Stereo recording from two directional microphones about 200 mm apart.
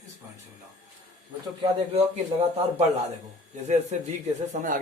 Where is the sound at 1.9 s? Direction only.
30° right (ahead or behind).